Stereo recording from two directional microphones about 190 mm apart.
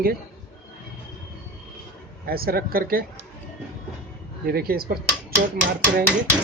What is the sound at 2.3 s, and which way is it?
Speech, 50° right (ahead or behind).